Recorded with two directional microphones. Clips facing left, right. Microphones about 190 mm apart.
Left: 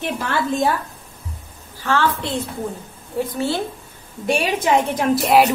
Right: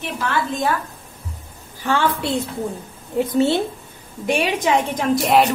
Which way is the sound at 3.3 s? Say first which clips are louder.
Right 7 dB; 20° right (ahead or behind).